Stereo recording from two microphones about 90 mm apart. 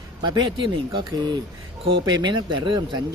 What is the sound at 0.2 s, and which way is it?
Speech, 55° right (ahead or behind).